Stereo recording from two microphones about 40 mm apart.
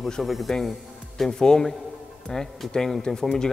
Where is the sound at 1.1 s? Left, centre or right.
Centre.